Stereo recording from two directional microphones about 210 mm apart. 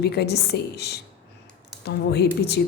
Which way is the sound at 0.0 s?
50° left (ahead or behind).